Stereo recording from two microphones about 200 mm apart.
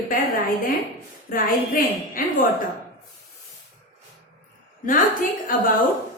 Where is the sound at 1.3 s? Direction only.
45° left (ahead or behind).